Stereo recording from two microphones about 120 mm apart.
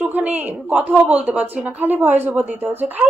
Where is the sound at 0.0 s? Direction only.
10° right (ahead or behind).